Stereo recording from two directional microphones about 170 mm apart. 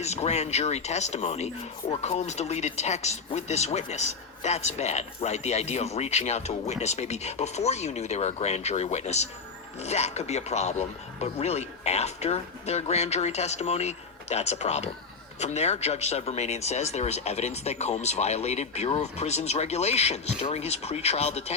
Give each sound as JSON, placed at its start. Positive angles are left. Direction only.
{"t": 0.0, "sound": "speech", "side_deg": 40}